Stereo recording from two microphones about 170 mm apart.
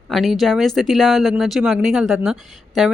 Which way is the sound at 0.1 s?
Centre (ahead or behind).